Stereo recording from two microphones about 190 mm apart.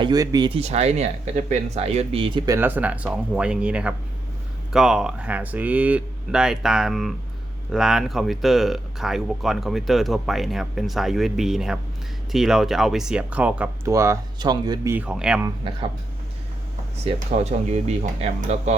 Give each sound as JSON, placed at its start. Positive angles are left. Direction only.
{"t": 0.0, "sound": "speech", "side_deg": -20}
{"t": 2.6, "sound": "speech", "side_deg": -10}
{"t": 14.9, "sound": "speech", "side_deg": -5}
{"t": 15.4, "sound": "speech", "side_deg": -25}
{"t": 17.8, "sound": "speech", "side_deg": -40}